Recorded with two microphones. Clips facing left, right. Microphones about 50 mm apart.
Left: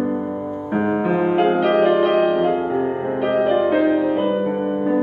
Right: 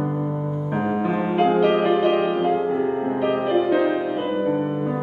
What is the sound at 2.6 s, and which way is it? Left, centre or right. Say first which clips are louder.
Music: left 1 dB; centre.